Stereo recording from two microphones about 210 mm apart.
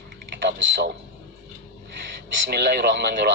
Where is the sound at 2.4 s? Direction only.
50° right (ahead or behind).